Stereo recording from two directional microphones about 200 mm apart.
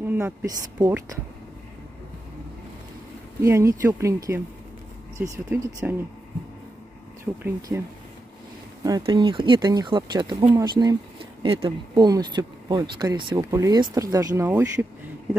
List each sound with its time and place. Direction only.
0.0 s speech: 10° right (ahead or behind)
3.4 s speech: 15° right (ahead or behind)
7.4 s speech: 15° right (ahead or behind)
8.8 s speech: 20° right (ahead or behind)